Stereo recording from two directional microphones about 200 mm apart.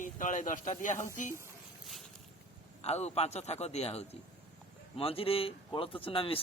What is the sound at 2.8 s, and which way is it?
A man's voice, 30° left (ahead or behind).